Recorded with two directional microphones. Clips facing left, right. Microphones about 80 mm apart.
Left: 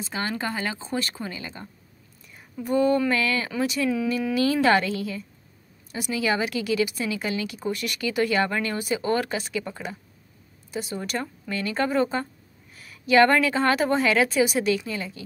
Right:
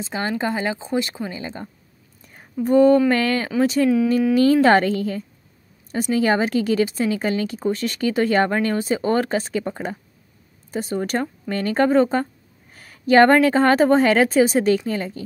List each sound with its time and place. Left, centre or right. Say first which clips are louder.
0.0 s speech: right 5 dB; right
2.2 s whispering: right 8 dB; right
3.1 s speech: right 5 dB; right